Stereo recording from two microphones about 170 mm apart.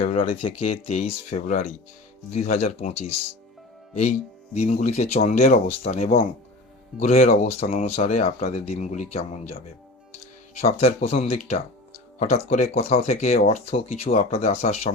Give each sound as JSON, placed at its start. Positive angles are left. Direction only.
{"t": 0.0, "sound": "speech", "side_deg": 45}
{"t": 4.5, "sound": "speech", "side_deg": 40}